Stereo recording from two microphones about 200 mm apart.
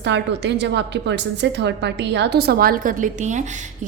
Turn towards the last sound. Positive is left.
turn(degrees=-35)  # may be behind; listen again after turning